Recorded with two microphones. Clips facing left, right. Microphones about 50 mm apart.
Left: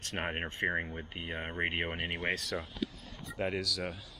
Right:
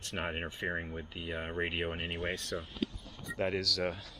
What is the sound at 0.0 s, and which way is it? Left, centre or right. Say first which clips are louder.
Speech: left 1 dB; left.